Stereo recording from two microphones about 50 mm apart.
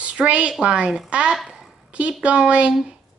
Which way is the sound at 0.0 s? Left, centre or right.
Right.